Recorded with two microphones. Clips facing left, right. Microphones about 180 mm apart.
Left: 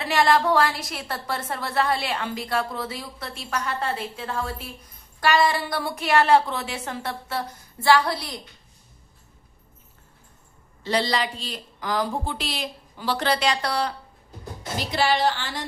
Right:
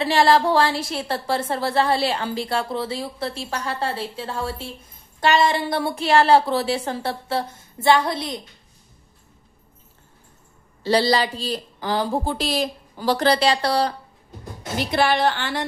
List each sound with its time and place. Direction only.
0.0 s a woman's voice: 30° right (ahead or behind)
10.8 s speech: 35° right (ahead or behind)
14.8 s a woman's voice: 60° right (ahead or behind)